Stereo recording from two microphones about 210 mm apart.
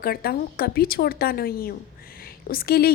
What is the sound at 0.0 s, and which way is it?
A woman's voice, 45° left (ahead or behind).